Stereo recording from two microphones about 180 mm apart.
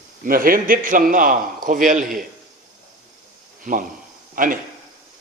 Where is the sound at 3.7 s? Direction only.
45° right (ahead or behind).